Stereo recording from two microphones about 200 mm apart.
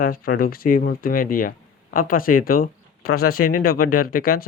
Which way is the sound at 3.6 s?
45° left (ahead or behind).